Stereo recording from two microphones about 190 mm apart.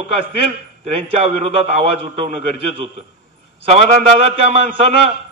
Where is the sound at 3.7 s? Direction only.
30° right (ahead or behind).